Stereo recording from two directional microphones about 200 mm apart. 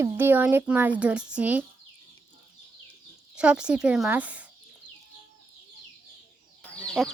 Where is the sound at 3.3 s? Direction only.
5° right (ahead or behind).